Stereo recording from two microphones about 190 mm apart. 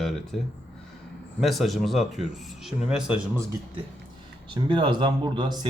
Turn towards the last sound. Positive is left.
turn(degrees=-25)  # may be behind; listen again after turning